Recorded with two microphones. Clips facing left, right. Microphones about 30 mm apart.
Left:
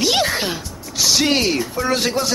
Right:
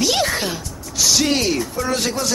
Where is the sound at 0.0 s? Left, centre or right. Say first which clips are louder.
Left 1 dB; centre.